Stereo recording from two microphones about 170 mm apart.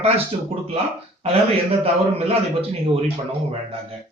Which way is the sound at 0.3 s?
40° right (ahead or behind).